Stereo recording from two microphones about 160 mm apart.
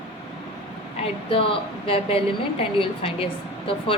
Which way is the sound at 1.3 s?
35° left (ahead or behind).